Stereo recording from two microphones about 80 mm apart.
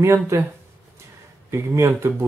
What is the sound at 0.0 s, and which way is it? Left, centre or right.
Speech, right.